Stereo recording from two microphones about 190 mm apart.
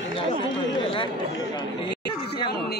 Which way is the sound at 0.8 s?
25° left (ahead or behind).